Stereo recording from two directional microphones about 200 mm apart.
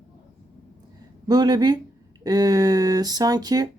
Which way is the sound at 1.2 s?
20° right (ahead or behind).